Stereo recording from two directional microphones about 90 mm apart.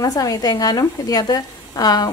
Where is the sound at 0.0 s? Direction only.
45° left (ahead or behind).